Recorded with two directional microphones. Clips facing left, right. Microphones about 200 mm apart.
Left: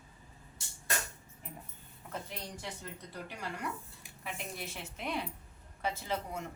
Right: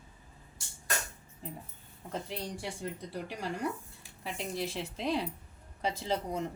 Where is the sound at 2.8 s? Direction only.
30° right (ahead or behind).